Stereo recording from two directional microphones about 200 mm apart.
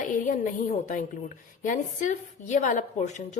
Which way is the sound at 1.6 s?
40° left (ahead or behind).